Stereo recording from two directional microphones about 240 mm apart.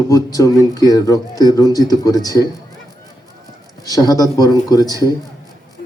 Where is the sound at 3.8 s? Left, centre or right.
Centre.